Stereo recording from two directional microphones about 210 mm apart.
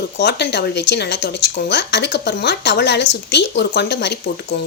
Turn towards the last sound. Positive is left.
turn(degrees=50)  # may be behind; listen again after turning